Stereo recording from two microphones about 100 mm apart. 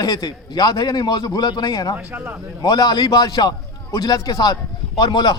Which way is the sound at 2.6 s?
40° left (ahead or behind).